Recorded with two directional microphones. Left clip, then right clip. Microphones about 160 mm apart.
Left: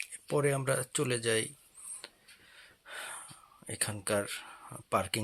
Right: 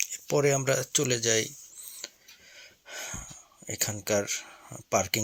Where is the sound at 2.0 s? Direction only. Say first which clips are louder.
Right 7 dB; 20° right (ahead or behind).